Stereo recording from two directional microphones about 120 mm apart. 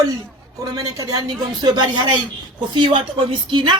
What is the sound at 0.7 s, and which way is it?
A woman's voice, 30° right (ahead or behind).